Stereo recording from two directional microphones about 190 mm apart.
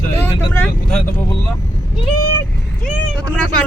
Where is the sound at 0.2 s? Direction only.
10° left (ahead or behind).